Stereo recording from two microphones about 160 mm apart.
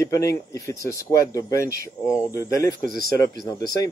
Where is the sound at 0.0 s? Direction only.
20° left (ahead or behind).